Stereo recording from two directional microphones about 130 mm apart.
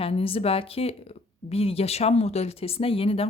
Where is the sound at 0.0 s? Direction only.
45° left (ahead or behind).